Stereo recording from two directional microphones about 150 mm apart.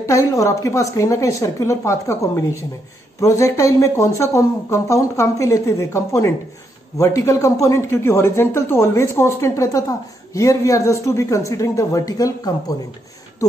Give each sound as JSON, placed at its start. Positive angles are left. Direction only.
{"t": 0.0, "sound": "speech", "side_deg": 20}